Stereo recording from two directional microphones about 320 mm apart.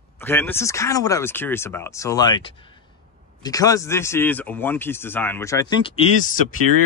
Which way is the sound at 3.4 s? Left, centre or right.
Centre.